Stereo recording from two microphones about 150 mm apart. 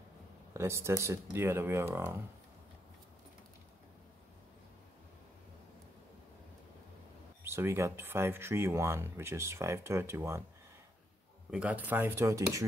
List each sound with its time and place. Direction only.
0.5 s speech: 20° right (ahead or behind)
7.4 s speech: 15° right (ahead or behind)
11.5 s speech: 10° right (ahead or behind)